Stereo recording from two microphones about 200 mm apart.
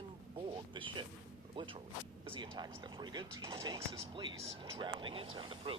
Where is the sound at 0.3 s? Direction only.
25° right (ahead or behind).